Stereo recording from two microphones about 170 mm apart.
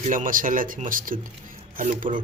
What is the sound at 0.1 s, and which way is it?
Speech, 50° right (ahead or behind).